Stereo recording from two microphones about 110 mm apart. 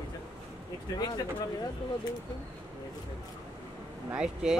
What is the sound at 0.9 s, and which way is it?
Speech, 40° left (ahead or behind).